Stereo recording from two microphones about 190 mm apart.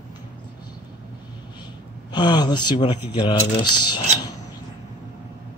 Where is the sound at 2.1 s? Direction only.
20° left (ahead or behind).